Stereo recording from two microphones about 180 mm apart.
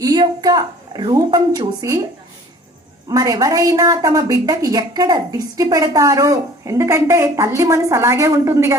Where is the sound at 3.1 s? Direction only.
20° right (ahead or behind).